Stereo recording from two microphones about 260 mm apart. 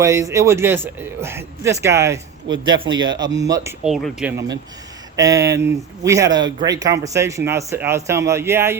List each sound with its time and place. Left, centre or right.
0.0 s speech: centre
3.8 s speech: centre